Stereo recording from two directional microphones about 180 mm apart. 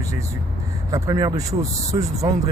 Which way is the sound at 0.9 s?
20° right (ahead or behind).